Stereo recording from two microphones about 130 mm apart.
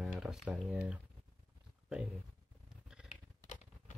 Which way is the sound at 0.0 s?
5° right (ahead or behind).